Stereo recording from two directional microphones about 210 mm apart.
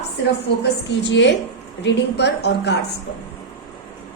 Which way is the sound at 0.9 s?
60° left (ahead or behind).